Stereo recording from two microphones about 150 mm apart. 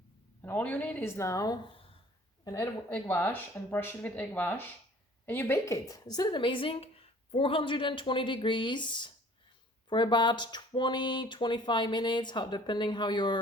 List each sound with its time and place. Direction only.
0.4 s a woman's voice: 10° left (ahead or behind); by 13.4 s 30° left (ahead or behind)